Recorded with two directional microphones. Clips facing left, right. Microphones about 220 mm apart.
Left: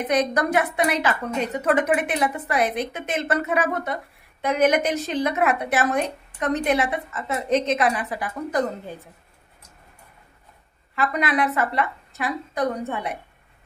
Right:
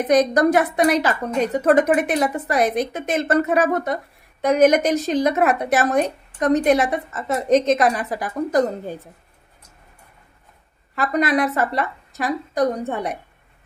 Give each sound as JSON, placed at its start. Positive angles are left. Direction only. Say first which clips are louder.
{"t": 0.1, "sound": "a woman's voice", "louder": "right 6 dB", "side_deg": -40}
{"t": 11.0, "sound": "a woman's voice", "louder": "right 4 dB", "side_deg": -40}